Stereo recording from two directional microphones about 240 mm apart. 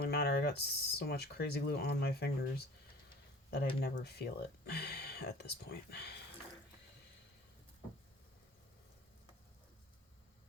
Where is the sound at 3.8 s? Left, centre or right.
Left.